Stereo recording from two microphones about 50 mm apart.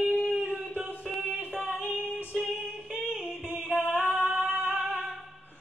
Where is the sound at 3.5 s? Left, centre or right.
Right.